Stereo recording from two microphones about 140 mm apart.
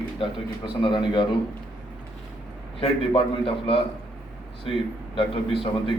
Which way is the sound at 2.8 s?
40° left (ahead or behind).